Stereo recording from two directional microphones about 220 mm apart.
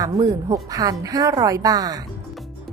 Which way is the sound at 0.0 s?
15° right (ahead or behind).